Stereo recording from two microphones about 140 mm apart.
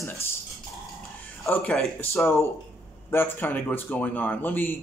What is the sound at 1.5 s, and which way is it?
Speech, 5° left (ahead or behind).